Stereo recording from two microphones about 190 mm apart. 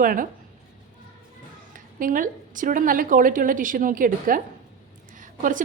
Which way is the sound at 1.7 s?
45° right (ahead or behind).